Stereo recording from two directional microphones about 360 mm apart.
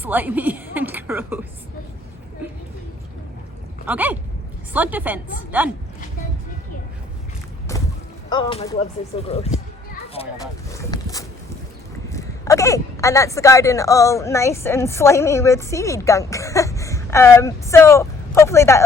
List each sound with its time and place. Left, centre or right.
0.0 s a woman's voice: centre
3.8 s a woman's voice: centre
7.7 s rowboat: centre
8.3 s speech: centre
10.7 s speech: centre